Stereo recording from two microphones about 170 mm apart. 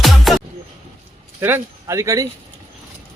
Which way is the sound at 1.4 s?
15° right (ahead or behind).